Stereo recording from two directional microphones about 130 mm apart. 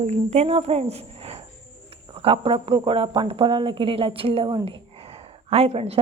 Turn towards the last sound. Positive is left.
turn(degrees=-50)  # may be behind; listen again after turning